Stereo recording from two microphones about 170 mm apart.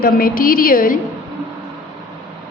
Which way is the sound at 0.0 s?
60° left (ahead or behind).